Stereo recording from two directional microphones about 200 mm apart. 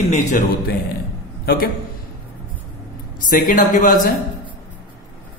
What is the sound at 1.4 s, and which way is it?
Speech, 45° left (ahead or behind).